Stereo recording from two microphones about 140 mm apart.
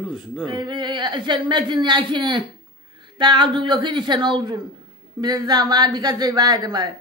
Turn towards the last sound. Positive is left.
turn(degrees=-30)  # may be behind; listen again after turning